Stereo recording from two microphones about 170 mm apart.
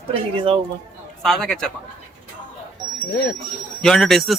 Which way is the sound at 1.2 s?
5° left (ahead or behind).